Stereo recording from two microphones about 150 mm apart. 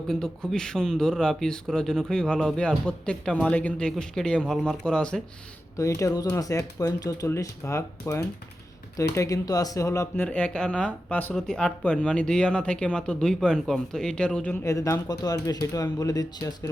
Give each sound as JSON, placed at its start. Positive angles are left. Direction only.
{"t": 0.1, "sound": "speech", "side_deg": 5}
{"t": 5.7, "sound": "speech", "side_deg": 20}
{"t": 10.2, "sound": "speech", "side_deg": 5}